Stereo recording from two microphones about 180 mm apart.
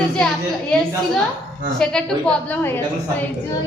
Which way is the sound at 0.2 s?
5° left (ahead or behind).